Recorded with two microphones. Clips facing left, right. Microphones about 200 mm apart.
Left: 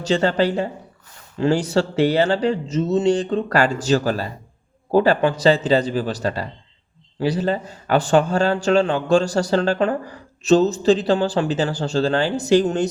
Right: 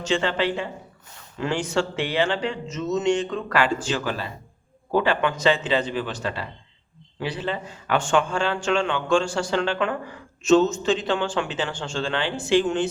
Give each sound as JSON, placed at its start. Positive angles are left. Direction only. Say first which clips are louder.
{"t": 0.0, "sound": "a man's voice", "louder": "left 5 dB", "side_deg": 40}